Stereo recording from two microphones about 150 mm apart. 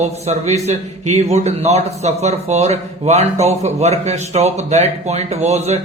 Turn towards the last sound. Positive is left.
turn(degrees=-45)  # may be behind; listen again after turning